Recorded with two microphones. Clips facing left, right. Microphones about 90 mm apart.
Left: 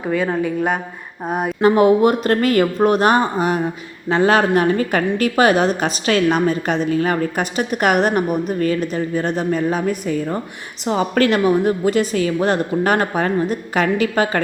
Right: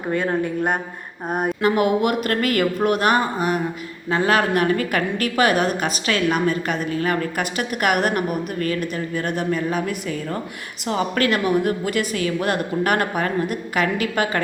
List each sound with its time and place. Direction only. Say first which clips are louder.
1.3 s speech: left 1 dB; centre (ahead or behind)
1.6 s a woman's voice: left 7 dB; 30° left (ahead or behind)